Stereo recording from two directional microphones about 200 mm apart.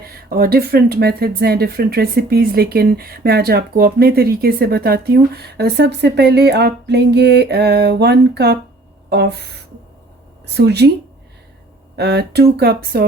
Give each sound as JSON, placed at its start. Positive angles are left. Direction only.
{"t": 0.2, "sound": "speech", "side_deg": -50}
{"t": 10.5, "sound": "a woman's voice", "side_deg": -55}
{"t": 11.9, "sound": "speech", "side_deg": -55}